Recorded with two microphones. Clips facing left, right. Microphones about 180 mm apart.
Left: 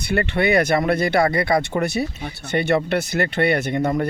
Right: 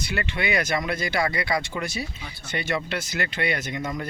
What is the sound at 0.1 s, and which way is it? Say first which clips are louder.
Speech: left 9 dB; 55° left (ahead or behind).